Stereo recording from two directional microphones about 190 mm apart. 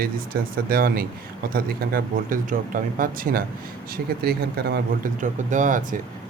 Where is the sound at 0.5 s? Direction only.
50° right (ahead or behind).